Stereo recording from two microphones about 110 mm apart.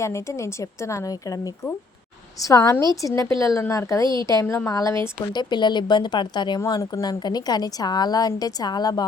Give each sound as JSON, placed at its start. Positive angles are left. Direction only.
{"t": 0.0, "sound": "a woman's voice", "side_deg": 25}
{"t": 2.4, "sound": "a woman's voice", "side_deg": 30}
{"t": 4.0, "sound": "a woman's voice", "side_deg": -45}
{"t": 4.3, "sound": "a woman's voice", "side_deg": 30}
{"t": 5.3, "sound": "a woman's voice", "side_deg": 45}